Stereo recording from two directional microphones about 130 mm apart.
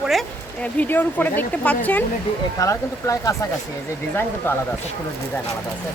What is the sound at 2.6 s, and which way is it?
Speech, 25° left (ahead or behind).